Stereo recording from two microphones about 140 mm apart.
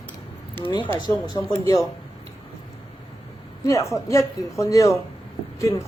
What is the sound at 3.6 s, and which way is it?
Speech, 20° left (ahead or behind).